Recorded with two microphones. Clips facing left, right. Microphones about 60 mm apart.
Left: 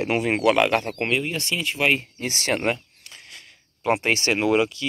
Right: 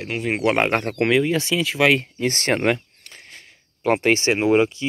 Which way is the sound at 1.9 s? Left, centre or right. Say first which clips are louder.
Right 4 dB; right.